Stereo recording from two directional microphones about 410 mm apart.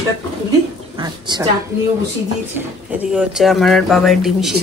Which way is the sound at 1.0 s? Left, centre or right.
Centre.